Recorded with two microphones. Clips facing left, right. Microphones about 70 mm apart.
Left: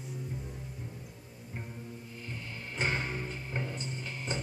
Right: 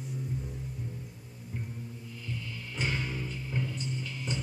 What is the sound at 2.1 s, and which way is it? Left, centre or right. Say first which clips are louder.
Music: right 4 dB; left.